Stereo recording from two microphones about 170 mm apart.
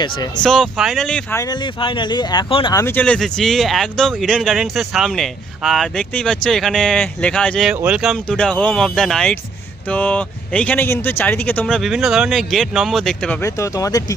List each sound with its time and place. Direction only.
0.0 s speech: 25° left (ahead or behind)
0.4 s speech: 5° left (ahead or behind)
1.4 s speech: 25° left (ahead or behind)
2.7 s speech: 15° left (ahead or behind)
7.7 s speech: 5° right (ahead or behind)
13.4 s speech: 20° left (ahead or behind)